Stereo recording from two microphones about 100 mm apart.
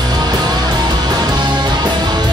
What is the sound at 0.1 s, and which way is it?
Music, 45° right (ahead or behind).